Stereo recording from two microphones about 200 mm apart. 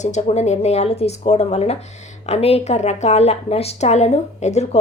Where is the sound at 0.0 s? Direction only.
35° left (ahead or behind).